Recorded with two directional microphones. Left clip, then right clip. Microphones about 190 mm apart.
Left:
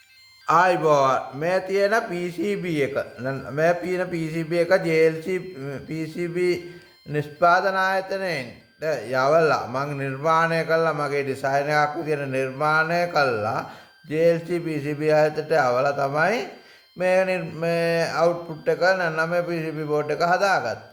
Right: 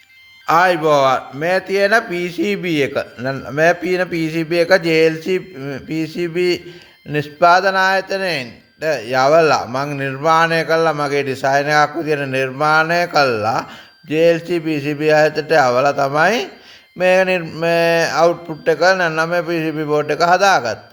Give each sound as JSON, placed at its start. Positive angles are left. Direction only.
{"t": 0.4, "sound": "a man's voice", "side_deg": -20}